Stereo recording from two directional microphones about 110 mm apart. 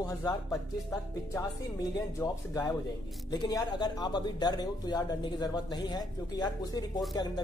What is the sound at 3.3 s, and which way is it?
Speech, 40° left (ahead or behind).